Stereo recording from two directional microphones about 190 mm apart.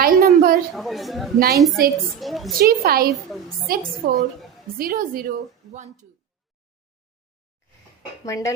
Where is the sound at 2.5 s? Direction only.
55° right (ahead or behind).